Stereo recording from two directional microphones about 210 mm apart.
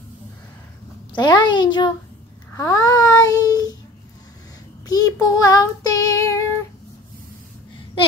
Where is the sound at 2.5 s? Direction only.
15° left (ahead or behind).